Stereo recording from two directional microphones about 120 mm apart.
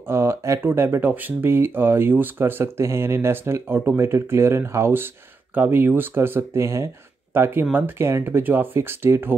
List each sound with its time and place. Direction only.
0.0 s speech: 20° right (ahead or behind)